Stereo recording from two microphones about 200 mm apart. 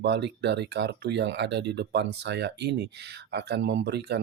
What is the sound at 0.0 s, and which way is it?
Speech, 60° right (ahead or behind).